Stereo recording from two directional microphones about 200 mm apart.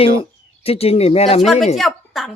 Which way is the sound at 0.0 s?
30° left (ahead or behind).